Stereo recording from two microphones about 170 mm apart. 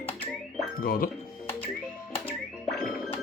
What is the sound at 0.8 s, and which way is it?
Music, 60° left (ahead or behind).